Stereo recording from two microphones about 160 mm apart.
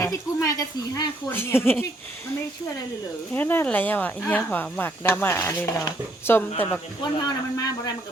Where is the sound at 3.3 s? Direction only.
10° left (ahead or behind).